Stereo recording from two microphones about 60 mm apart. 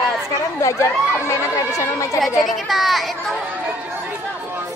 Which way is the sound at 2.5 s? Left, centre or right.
Centre.